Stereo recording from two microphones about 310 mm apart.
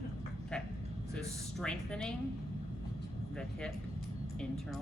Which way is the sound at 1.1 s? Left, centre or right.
Centre.